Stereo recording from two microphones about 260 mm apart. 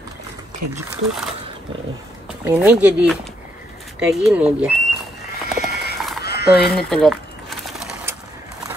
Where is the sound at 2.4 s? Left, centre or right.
Centre.